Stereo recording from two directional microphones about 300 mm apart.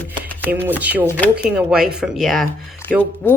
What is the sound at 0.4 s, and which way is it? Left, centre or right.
A woman's voice, centre.